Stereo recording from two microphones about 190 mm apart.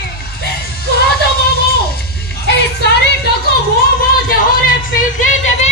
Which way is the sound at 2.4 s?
60° left (ahead or behind).